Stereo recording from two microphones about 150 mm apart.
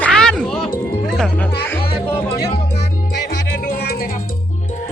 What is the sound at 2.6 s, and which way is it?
Music, 90° left.